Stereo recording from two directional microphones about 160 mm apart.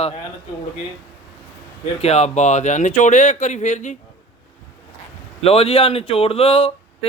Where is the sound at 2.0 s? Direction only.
40° left (ahead or behind).